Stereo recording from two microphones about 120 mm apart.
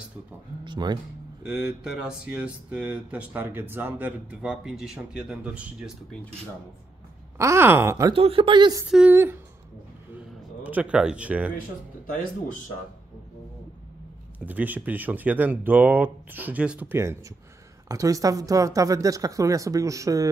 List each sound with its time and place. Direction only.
0.7 s speech: 35° right (ahead or behind)
1.4 s speech: 10° right (ahead or behind)
7.3 s a woman's voice: 25° right (ahead or behind)
8.1 s speech: 50° right (ahead or behind)
8.8 s speech: 5° right (ahead or behind)
9.1 s a woman's voice: 20° right (ahead or behind)
10.1 s a sound: 10° right (ahead or behind)
14.4 s a woman's voice: 15° right (ahead or behind)